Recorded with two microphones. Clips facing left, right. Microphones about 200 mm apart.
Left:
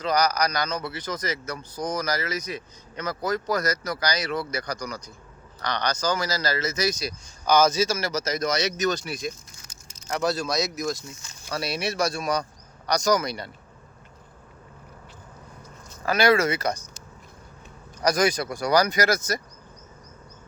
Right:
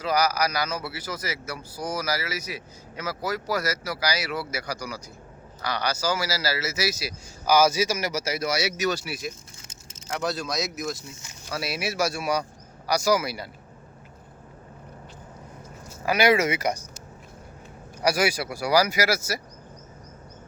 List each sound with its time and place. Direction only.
0.0 s a man's voice: 5° right (ahead or behind)
9.6 s vehicle: 25° right (ahead or behind)
10.2 s a man's voice: centre (ahead or behind)
15.9 s speech: 15° right (ahead or behind)
18.0 s a man's voice: 10° right (ahead or behind)